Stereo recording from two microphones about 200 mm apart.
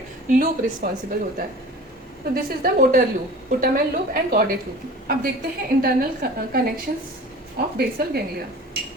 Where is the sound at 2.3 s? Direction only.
45° right (ahead or behind).